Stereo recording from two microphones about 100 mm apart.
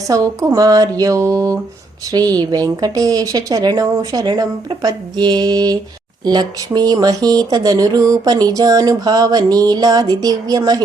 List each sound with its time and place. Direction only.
0.1 s speech: 35° right (ahead or behind)